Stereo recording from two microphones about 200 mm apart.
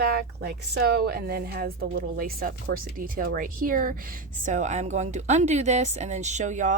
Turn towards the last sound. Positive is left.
turn(degrees=-35)  # may be behind; listen again after turning